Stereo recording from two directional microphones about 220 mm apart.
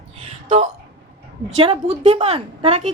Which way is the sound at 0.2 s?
25° right (ahead or behind).